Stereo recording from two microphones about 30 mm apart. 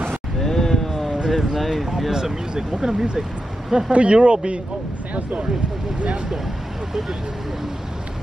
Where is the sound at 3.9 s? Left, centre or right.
Right.